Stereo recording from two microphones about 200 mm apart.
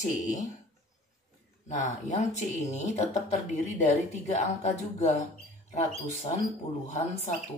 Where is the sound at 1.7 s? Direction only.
35° left (ahead or behind).